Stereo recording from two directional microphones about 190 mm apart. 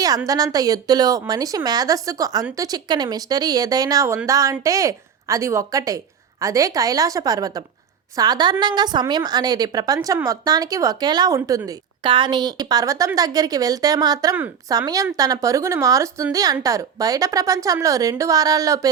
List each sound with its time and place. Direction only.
0.3 s a woman's voice: 20° right (ahead or behind)